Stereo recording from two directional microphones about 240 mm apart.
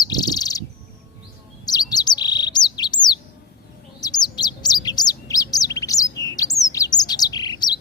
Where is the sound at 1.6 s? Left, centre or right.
Centre.